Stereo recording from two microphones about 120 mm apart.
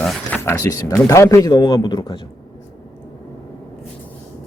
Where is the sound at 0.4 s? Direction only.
25° left (ahead or behind).